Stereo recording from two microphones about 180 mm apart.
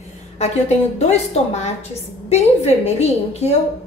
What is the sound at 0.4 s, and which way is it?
A woman's voice, 35° left (ahead or behind).